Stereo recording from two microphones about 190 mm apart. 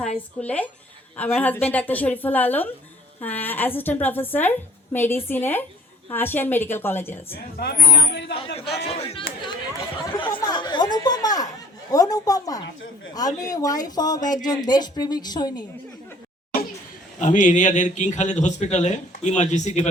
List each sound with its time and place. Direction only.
0.2 s a woman's voice: 10° left (ahead or behind)
7.6 s speech: 55° left (ahead or behind)
8.9 s a man's voice: 30° left (ahead or behind)
10.1 s chatter: 25° left (ahead or behind)
11.9 s speech: 20° left (ahead or behind)
17.2 s a man's voice: 40° left (ahead or behind)